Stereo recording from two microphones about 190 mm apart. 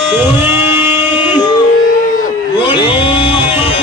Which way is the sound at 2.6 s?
25° left (ahead or behind).